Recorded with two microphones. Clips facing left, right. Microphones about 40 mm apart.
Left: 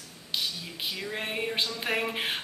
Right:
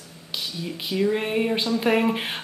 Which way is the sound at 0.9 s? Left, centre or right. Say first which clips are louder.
Right 12 dB; centre.